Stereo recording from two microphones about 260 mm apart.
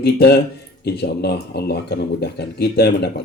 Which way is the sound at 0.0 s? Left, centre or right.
Left.